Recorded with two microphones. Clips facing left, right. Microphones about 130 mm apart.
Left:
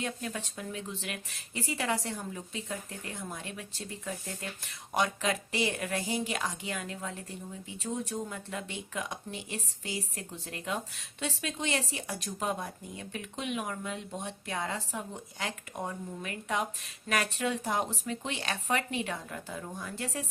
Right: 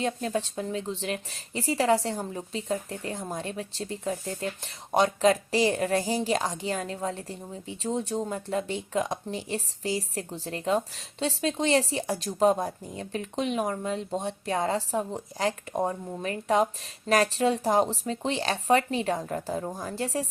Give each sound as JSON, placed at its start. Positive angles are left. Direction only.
{"t": 0.0, "sound": "a woman's voice", "side_deg": -35}